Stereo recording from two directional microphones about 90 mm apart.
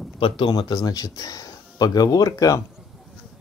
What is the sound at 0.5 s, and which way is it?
Speech, 50° left (ahead or behind).